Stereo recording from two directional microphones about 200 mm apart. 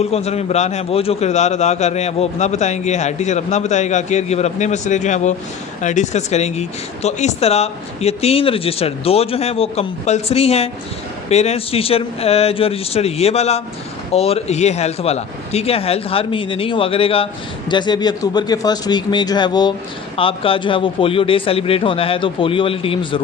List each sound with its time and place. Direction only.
0.0 s a man's voice: 30° left (ahead or behind)